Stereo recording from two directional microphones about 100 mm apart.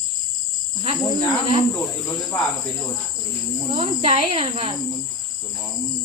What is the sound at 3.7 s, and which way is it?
Speech, 75° right (ahead or behind).